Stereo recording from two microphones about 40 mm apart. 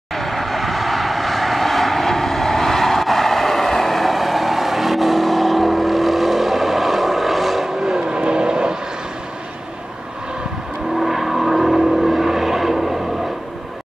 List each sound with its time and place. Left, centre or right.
0.1 s vehicle: centre
7.9 s vehicle: right
11.0 s vehicle: centre